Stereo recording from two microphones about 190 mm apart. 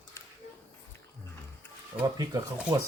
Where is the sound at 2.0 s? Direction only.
20° right (ahead or behind).